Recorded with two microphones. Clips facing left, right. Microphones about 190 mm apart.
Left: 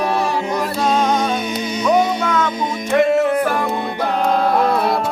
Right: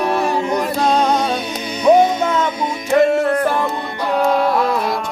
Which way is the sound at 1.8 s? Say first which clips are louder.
Right 5 dB; 20° right (ahead or behind).